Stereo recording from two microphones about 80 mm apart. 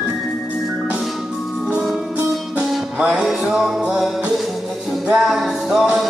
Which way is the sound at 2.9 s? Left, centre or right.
Centre.